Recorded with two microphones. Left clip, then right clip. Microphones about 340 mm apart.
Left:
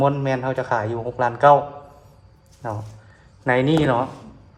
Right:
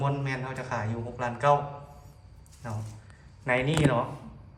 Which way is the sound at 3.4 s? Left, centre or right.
Left.